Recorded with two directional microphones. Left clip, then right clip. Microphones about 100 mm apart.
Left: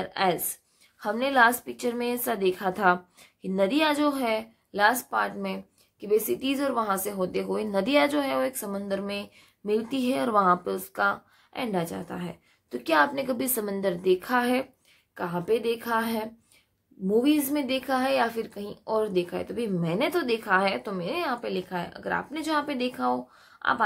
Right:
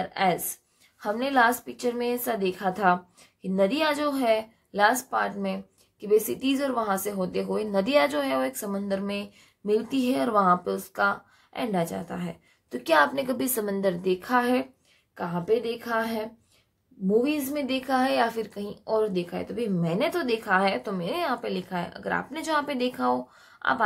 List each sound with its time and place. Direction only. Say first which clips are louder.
0.0 s a woman's voice: right 1 dB; 30° left (ahead or behind)
12.7 s a woman's voice: right 1 dB; 15° left (ahead or behind)
13.9 s a woman's voice: even; 30° left (ahead or behind)
15.1 s a woman's voice: right 1 dB; 45° left (ahead or behind); by 18.8 s 20° left (ahead or behind)
18.9 s a woman's voice: even; 35° left (ahead or behind); by 23.5 s 5° left (ahead or behind)
23.5 s a sound: even; 15° left (ahead or behind)